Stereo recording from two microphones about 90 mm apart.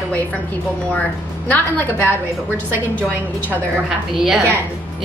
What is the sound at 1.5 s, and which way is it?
Speech, 20° left (ahead or behind).